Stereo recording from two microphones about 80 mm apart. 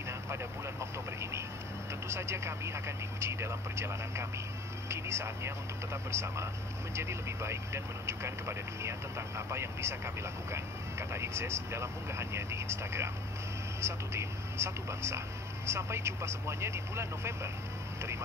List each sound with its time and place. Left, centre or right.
0.3 s vehicle: right
2.0 s speech: right